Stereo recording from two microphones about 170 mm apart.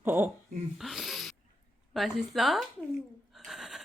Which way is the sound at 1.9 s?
Centre (ahead or behind).